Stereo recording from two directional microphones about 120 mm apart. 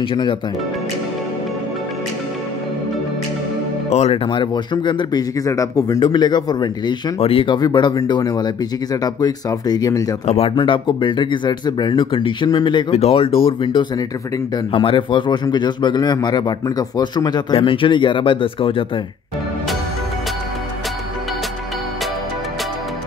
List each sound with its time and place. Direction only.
0.0 s speech: 45° left (ahead or behind)
3.9 s a man's voice: 55° left (ahead or behind); by 5.9 s 25° left (ahead or behind)
5.9 s a man's voice: 40° left (ahead or behind)
7.2 s speech: 50° left (ahead or behind)
7.5 s a man's voice: 35° left (ahead or behind)
10.2 s speech: 55° left (ahead or behind); by 12.8 s 40° left (ahead or behind)
12.9 s a man's voice: 60° left (ahead or behind)